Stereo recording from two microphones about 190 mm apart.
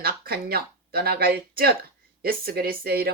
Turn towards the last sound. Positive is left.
turn(degrees=-50)  # may be behind; listen again after turning